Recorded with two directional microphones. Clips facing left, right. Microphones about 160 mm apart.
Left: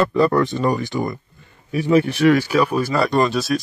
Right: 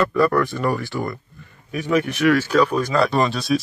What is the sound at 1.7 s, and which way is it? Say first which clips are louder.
Speech: left 4 dB; 30° left (ahead or behind).